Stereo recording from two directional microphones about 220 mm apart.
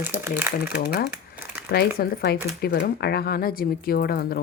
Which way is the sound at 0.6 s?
45° left (ahead or behind).